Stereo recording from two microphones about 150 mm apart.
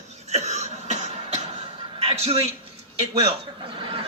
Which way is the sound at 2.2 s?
45° right (ahead or behind).